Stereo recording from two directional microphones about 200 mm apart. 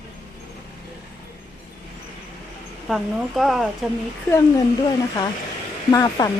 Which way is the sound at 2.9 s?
Centre (ahead or behind).